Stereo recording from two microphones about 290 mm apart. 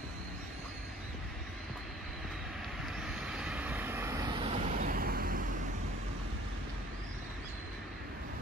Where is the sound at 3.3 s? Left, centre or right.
Centre; by 5.4 s right.